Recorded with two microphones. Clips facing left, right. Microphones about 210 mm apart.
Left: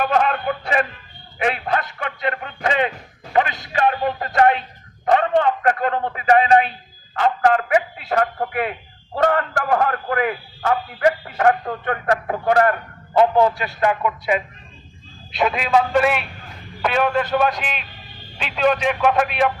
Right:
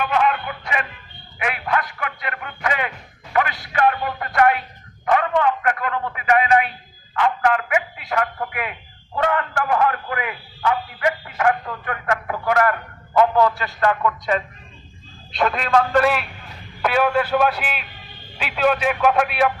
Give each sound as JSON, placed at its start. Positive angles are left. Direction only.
{"t": 0.0, "sound": "a sound", "side_deg": 40}
{"t": 1.4, "sound": "a man's voice", "side_deg": 30}
{"t": 13.3, "sound": "speech", "side_deg": 15}
{"t": 15.3, "sound": "speech", "side_deg": 5}